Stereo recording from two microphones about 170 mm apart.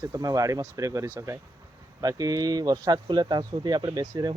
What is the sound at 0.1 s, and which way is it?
Speech, 20° right (ahead or behind).